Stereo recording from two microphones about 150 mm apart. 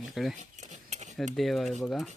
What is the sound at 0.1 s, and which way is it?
Speech, centre (ahead or behind).